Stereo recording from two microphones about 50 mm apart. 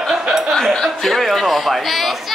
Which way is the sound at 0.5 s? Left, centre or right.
Centre.